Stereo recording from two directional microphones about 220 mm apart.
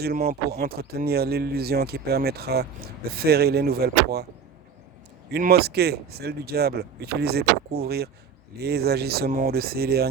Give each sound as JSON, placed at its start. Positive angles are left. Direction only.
{"t": 0.0, "sound": "speech", "side_deg": -45}
{"t": 5.3, "sound": "speech", "side_deg": -45}